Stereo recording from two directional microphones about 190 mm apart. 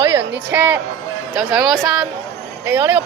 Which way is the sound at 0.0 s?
15° right (ahead or behind).